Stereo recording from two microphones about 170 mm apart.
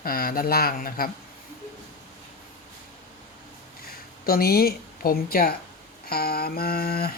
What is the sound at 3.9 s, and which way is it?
A woman's voice, 60° left (ahead or behind).